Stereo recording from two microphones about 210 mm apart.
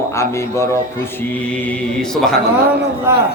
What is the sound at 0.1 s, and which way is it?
Mantra, 15° left (ahead or behind).